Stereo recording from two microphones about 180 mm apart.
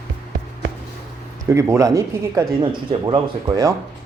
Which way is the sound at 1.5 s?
15° right (ahead or behind).